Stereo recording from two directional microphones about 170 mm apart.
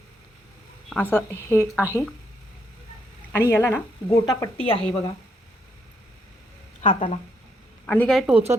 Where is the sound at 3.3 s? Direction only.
15° left (ahead or behind).